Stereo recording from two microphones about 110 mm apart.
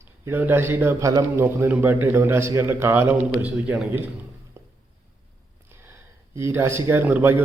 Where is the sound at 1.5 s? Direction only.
20° right (ahead or behind).